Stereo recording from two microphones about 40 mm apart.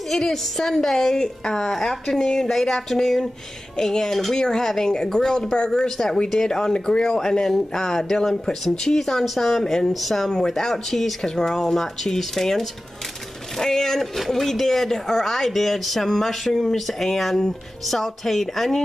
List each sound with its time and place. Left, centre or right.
0.1 s a woman's voice: centre
11.2 s a woman's voice: centre